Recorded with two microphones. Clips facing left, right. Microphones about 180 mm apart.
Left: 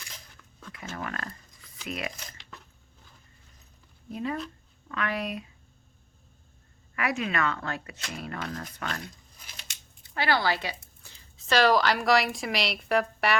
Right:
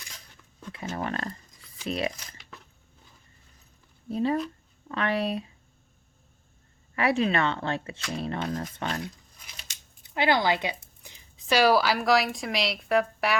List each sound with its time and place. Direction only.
0.7 s speech: 30° right (ahead or behind)
4.1 s speech: 30° right (ahead or behind)
6.9 s speech: 30° right (ahead or behind)
10.0 s a woman's voice: 20° right (ahead or behind); by 13.3 s centre (ahead or behind)